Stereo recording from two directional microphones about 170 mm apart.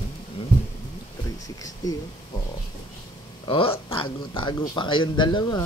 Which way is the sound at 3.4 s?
30° left (ahead or behind).